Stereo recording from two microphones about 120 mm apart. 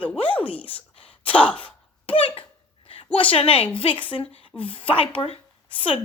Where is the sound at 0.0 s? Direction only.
10° left (ahead or behind).